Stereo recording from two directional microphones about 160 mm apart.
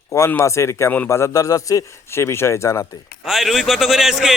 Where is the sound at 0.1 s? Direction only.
15° left (ahead or behind).